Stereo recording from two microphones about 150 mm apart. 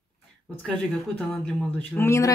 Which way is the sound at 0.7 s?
5° left (ahead or behind).